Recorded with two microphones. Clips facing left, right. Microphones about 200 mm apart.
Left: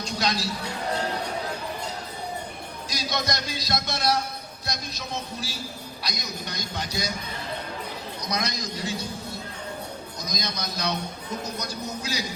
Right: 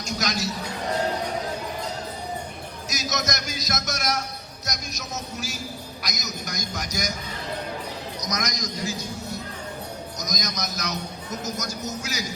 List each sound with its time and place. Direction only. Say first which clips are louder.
0.0 s music: even; 30° left (ahead or behind)
2.9 s a man's voice: even; 30° left (ahead or behind)
8.2 s a man's voice: left 1 dB; 30° left (ahead or behind)